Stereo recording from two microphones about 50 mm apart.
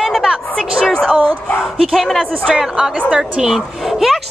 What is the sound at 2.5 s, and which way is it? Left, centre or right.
Speech, centre.